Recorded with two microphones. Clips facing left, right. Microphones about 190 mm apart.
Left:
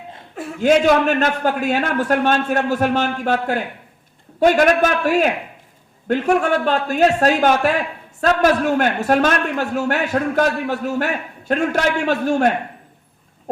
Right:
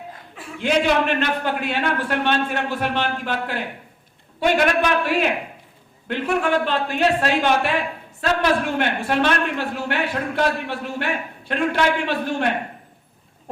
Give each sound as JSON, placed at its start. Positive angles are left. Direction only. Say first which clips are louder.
{"t": 0.3, "sound": "a man's voice", "louder": "left 6 dB", "side_deg": 45}